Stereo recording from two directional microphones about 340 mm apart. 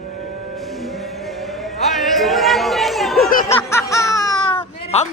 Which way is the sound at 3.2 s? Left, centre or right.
Left.